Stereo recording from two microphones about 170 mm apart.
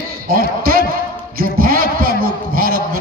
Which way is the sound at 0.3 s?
60° right (ahead or behind).